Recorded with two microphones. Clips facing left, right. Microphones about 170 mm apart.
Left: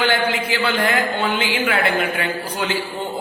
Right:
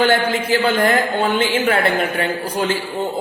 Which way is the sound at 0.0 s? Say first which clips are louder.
Right 3 dB; 45° right (ahead or behind).